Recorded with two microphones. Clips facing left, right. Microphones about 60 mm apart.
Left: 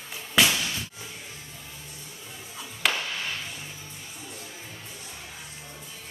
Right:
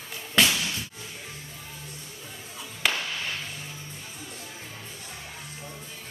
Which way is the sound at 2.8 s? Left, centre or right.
Centre.